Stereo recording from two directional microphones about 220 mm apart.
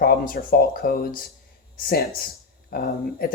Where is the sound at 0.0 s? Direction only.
45° left (ahead or behind).